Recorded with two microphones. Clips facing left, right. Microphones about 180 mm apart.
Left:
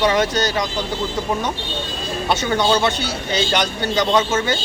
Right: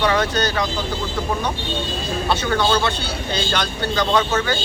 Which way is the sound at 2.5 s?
20° left (ahead or behind).